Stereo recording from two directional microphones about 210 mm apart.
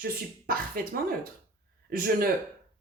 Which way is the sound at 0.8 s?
45° right (ahead or behind).